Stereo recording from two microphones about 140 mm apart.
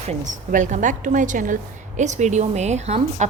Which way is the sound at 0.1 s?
60° right (ahead or behind).